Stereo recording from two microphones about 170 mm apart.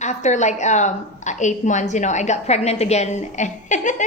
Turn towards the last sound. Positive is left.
turn(degrees=45)  # may be behind; listen again after turning